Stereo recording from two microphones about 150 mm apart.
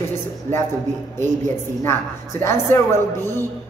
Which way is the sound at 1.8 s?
20° left (ahead or behind).